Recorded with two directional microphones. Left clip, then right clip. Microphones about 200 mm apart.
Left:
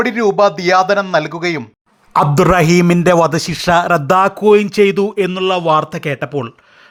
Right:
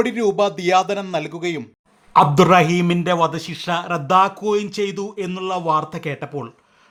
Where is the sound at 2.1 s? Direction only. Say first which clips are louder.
Left 1 dB; 25° left (ahead or behind).